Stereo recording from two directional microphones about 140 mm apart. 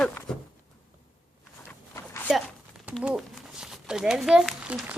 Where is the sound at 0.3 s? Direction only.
5° left (ahead or behind).